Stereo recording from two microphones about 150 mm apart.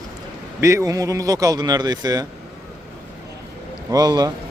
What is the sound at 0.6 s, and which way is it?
Speech, 20° right (ahead or behind).